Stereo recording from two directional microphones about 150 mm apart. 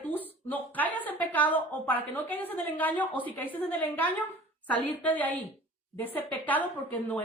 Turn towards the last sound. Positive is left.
turn(degrees=10)  # may be behind; listen again after turning